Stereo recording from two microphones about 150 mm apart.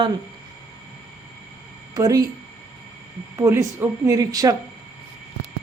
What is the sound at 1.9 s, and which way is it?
Speech, 25° right (ahead or behind).